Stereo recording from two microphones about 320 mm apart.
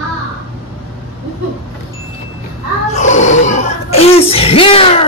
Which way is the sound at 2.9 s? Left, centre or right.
Left.